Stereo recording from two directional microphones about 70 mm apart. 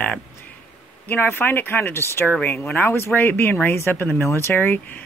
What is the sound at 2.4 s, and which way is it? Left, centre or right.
Speech, left.